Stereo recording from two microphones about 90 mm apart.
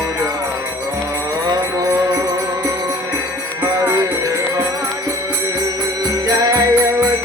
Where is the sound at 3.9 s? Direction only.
40° right (ahead or behind).